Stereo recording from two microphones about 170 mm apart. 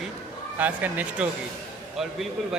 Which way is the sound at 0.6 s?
10° right (ahead or behind).